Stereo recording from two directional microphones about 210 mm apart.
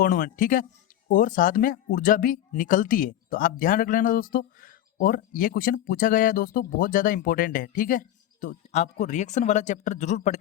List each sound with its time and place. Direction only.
0.0 s speech: 40° left (ahead or behind)